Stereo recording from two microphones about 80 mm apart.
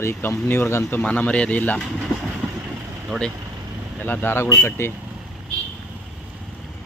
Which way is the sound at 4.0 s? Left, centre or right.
Left.